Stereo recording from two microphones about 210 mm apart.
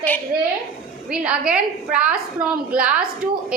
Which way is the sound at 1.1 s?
5° right (ahead or behind).